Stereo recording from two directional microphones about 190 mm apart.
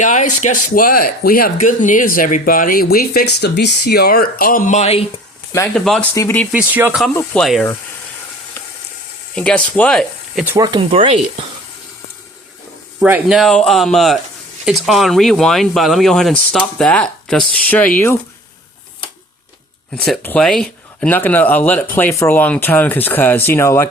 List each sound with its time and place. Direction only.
0.0 s speech: 40° left (ahead or behind)
5.7 s speech: 5° left (ahead or behind)
6.5 s speech: 5° right (ahead or behind)
7.2 s speech: centre (ahead or behind)
9.3 s speech: 5° left (ahead or behind)
10.4 s speech: 15° right (ahead or behind)
13.0 s speech: 5° right (ahead or behind); by 18.2 s 10° left (ahead or behind)
19.9 s speech: 5° left (ahead or behind)